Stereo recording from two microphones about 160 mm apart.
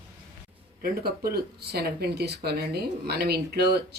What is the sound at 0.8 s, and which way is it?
Speech, 70° right (ahead or behind).